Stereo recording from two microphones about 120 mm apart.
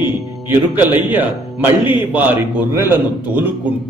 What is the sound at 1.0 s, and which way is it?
A man's voice, 15° right (ahead or behind).